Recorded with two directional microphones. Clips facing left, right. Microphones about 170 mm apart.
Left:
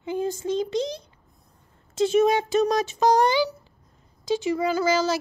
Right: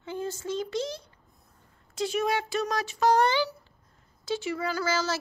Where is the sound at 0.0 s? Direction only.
15° left (ahead or behind).